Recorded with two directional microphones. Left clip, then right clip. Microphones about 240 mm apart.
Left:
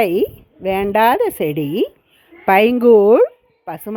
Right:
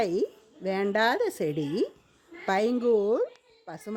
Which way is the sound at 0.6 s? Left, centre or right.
Left.